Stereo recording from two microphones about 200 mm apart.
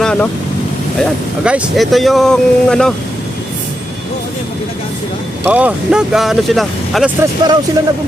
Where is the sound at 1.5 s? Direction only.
5° right (ahead or behind).